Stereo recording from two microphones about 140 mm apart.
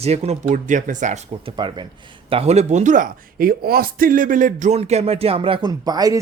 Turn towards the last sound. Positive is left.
turn(degrees=-25)  # may be behind; listen again after turning